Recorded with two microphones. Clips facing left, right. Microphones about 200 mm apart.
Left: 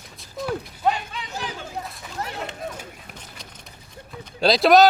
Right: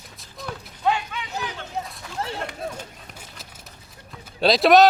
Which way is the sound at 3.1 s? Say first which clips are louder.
Left 1 dB; 5° right (ahead or behind).